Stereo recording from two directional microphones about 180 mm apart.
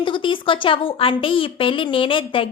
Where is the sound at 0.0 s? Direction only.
30° left (ahead or behind).